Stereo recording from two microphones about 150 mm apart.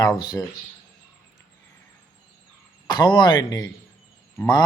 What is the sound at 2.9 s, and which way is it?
Speech, 30° left (ahead or behind).